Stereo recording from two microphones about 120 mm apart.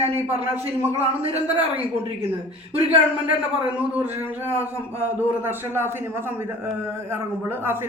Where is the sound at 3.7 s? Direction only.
15° right (ahead or behind).